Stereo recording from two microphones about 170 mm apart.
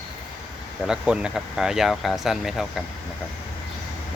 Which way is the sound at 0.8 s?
5° right (ahead or behind).